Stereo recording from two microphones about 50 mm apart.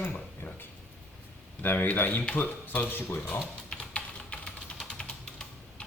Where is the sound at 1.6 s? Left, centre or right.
Left.